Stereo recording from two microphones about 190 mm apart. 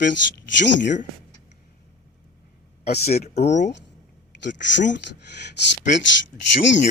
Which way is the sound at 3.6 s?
65° left (ahead or behind).